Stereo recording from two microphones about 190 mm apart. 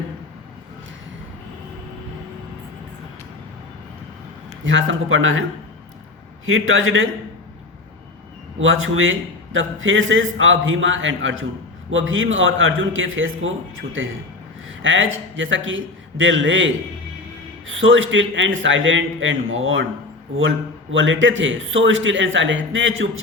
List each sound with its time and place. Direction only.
4.6 s a man's voice: 85° right
8.5 s a man's voice: 90° right
20.9 s a man's voice: 80° right